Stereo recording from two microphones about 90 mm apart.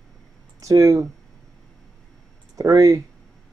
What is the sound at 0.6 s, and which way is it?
Speech, 40° right (ahead or behind).